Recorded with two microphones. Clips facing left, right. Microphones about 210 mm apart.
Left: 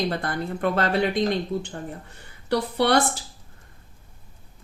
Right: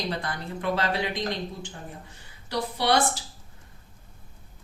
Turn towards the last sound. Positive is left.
turn(degrees=60)  # may be behind; listen again after turning